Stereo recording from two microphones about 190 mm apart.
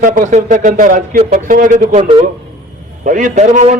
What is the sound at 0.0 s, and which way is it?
A man's voice, 45° right (ahead or behind).